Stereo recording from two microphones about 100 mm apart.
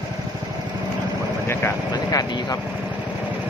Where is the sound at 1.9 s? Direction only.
40° left (ahead or behind).